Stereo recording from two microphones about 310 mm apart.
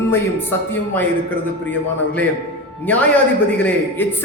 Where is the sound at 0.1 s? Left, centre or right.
Centre.